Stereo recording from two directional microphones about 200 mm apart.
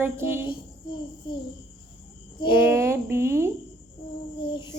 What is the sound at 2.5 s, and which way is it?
Speech, 10° right (ahead or behind).